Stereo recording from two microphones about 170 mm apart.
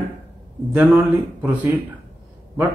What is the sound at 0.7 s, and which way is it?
Speech, 10° right (ahead or behind).